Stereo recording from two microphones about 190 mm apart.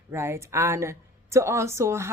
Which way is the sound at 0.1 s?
15° right (ahead or behind).